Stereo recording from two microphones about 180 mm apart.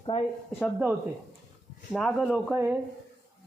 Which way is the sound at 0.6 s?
10° right (ahead or behind).